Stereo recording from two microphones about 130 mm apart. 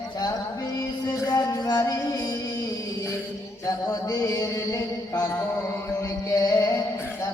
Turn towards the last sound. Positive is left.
turn(degrees=25)  # may be behind; listen again after turning